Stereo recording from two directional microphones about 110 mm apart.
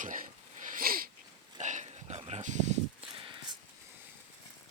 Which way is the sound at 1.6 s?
90° right.